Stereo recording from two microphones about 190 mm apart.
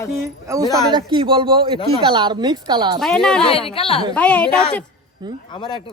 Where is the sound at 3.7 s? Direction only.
30° left (ahead or behind).